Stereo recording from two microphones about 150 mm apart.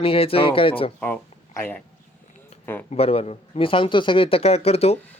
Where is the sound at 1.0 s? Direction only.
10° left (ahead or behind).